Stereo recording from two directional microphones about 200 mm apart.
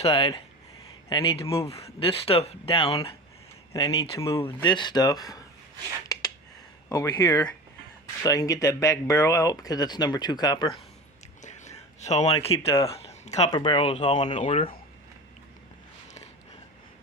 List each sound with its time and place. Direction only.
0.0 s speech: 30° left (ahead or behind)
3.7 s speech: 20° left (ahead or behind)
6.9 s speech: 20° left (ahead or behind)
11.4 s whispering: 35° left (ahead or behind)
12.5 s speech: 15° left (ahead or behind)
13.0 s a sound: 35° left (ahead or behind)
13.5 s speech: 25° left (ahead or behind)
14.3 s speech: 35° left (ahead or behind)